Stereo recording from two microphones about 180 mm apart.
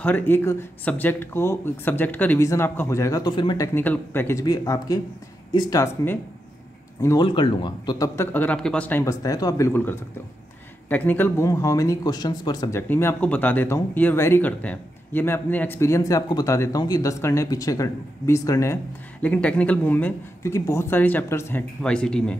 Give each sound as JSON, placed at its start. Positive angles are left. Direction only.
{"t": 0.0, "sound": "speech", "side_deg": 10}